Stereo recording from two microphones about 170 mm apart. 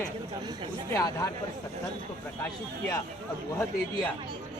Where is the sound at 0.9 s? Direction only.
20° left (ahead or behind).